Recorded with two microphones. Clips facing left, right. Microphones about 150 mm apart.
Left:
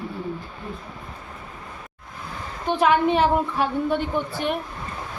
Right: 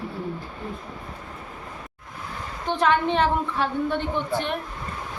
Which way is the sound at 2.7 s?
10° left (ahead or behind).